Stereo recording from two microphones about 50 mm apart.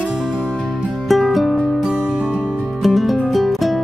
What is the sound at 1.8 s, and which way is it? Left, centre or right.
Music, centre.